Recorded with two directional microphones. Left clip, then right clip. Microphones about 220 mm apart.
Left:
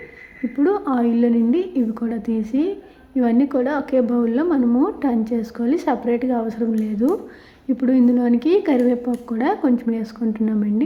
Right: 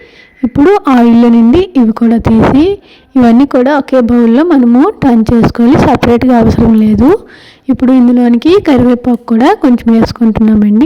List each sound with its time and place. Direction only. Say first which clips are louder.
0.6 s a woman's voice: right 13 dB; 40° right (ahead or behind)